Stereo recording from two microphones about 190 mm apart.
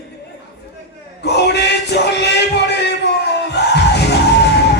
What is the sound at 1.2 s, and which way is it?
Speech, 60° left (ahead or behind).